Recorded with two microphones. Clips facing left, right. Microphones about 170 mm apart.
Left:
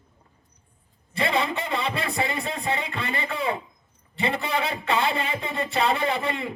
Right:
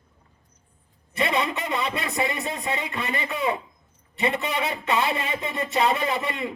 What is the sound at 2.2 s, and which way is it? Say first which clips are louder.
Speech: even; 30° left (ahead or behind).